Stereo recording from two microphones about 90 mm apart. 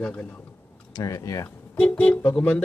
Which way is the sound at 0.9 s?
35° left (ahead or behind).